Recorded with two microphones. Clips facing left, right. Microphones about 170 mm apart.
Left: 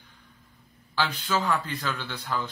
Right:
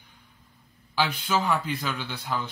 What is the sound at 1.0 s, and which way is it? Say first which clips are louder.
Speech: right 2 dB; 10° right (ahead or behind).